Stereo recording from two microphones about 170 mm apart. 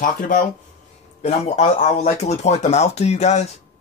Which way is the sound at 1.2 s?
40° left (ahead or behind).